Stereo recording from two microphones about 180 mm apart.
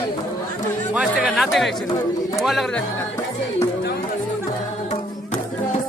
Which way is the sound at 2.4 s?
Centre (ahead or behind).